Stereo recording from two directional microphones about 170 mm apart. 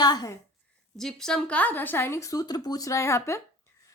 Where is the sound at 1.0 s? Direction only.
5° left (ahead or behind).